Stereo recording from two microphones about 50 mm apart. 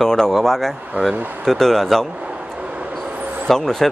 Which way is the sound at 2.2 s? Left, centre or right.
Right.